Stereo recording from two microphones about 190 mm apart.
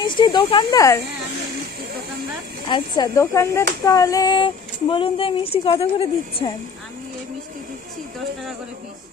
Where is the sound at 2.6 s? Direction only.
25° left (ahead or behind).